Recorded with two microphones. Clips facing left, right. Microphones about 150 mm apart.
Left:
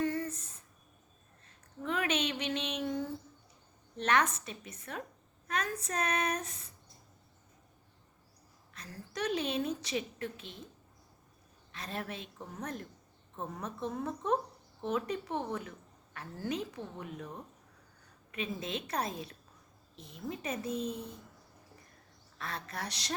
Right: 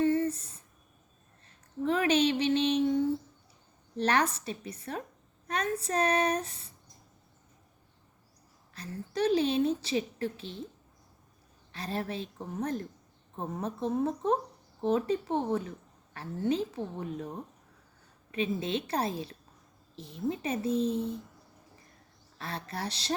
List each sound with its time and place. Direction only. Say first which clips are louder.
0.0 s a sound: right 7 dB; 25° right (ahead or behind)
1.8 s speech: right 7 dB; 35° right (ahead or behind)
3.9 s a woman's voice: right 2 dB; 35° right (ahead or behind)
8.7 s a woman's voice: right 8 dB; 30° right (ahead or behind)
11.7 s a woman's voice: right 6 dB; 35° right (ahead or behind)
22.4 s a woman's voice: right 3 dB; 30° right (ahead or behind)